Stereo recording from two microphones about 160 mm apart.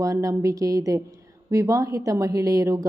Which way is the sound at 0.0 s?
20° right (ahead or behind).